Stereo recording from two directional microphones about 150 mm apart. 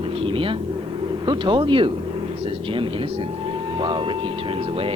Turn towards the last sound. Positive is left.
turn(degrees=-30)  # may be behind; listen again after turning